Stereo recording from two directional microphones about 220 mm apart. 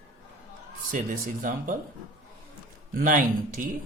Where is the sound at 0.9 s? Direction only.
35° right (ahead or behind).